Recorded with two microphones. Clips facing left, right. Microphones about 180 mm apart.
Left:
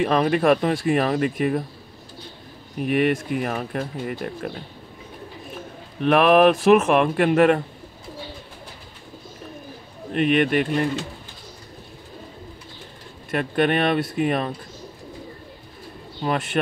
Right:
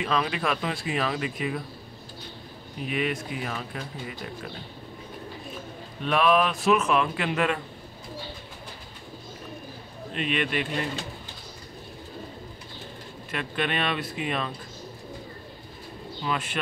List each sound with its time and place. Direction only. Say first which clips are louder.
0.0 s speech: left 8 dB; 50° left (ahead or behind)
2.8 s speech: left 8 dB; 55° left (ahead or behind)
6.0 s a man's voice: left 8 dB; 60° left (ahead or behind)
10.1 s speech: left 9 dB; 50° left (ahead or behind)
13.3 s speech: left 9 dB; 50° left (ahead or behind)
16.2 s speech: left 6 dB; 45° left (ahead or behind)